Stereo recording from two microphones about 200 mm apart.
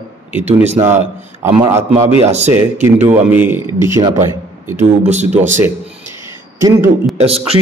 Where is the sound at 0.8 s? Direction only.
10° right (ahead or behind).